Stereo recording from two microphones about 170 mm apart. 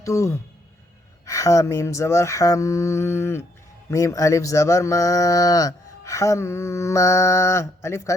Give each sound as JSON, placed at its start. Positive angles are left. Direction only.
{"t": 0.0, "sound": "speech", "side_deg": 20}